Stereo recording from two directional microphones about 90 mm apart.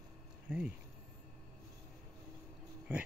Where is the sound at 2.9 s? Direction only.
15° right (ahead or behind).